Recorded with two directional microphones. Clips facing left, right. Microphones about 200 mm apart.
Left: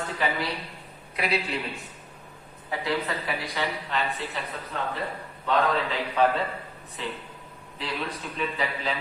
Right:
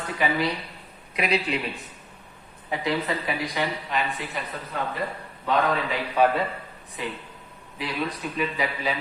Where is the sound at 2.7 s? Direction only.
20° right (ahead or behind).